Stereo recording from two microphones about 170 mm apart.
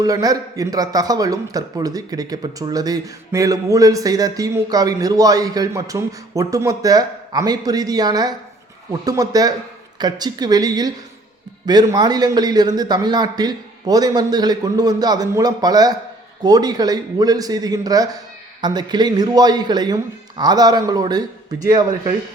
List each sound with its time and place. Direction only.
0.0 s a man's voice: 20° right (ahead or behind)